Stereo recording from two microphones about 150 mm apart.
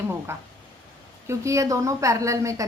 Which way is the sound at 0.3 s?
15° right (ahead or behind).